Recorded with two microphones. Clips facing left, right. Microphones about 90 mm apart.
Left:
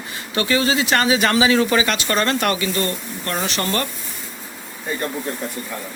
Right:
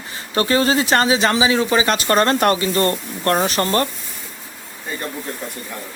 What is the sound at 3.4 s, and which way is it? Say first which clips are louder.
Speech: right 4 dB; 30° right (ahead or behind).